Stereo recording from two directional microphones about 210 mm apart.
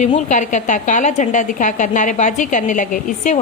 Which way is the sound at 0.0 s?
35° left (ahead or behind).